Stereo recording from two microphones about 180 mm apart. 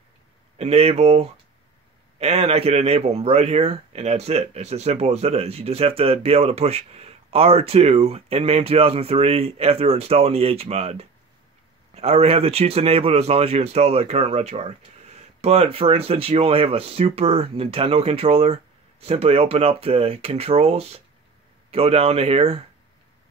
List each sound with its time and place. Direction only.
0.6 s speech: 35° right (ahead or behind)